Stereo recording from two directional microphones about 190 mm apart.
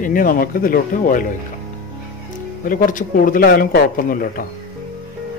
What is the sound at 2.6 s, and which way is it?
A man's voice, 45° left (ahead or behind).